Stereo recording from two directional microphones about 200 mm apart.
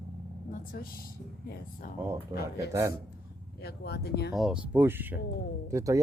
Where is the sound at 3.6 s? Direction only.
55° left (ahead or behind).